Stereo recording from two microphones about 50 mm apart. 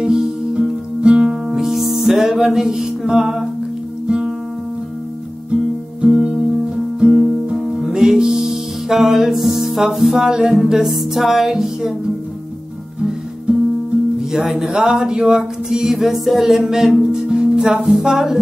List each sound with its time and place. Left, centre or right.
0.0 s music: centre
1.3 s music: centre
3.1 s a sound: centre
5.9 s music: centre
7.1 s music: centre
14.3 s a sound: centre